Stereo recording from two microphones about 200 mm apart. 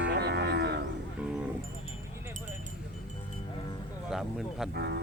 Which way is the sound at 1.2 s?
5° right (ahead or behind).